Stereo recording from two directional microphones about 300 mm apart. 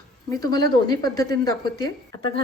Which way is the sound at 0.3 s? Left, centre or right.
Centre.